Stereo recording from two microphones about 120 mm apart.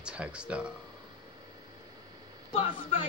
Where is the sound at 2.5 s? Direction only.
50° left (ahead or behind).